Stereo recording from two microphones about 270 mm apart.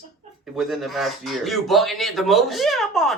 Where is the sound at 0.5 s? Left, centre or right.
Centre.